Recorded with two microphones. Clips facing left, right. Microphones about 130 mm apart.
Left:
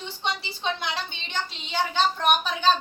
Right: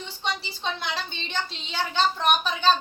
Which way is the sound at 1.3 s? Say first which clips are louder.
Left 2 dB; 15° left (ahead or behind).